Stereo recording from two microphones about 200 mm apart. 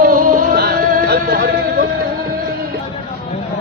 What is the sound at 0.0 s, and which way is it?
Music, 45° right (ahead or behind).